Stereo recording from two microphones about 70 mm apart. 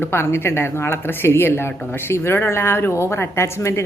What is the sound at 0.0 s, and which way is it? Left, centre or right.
Speech, left.